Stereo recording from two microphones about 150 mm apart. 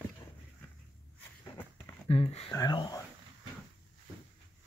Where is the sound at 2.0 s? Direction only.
40° left (ahead or behind).